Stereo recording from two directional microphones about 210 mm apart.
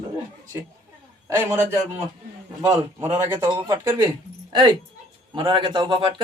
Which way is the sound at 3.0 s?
10° right (ahead or behind).